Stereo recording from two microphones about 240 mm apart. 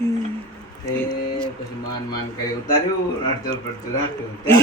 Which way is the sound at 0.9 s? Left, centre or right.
Centre.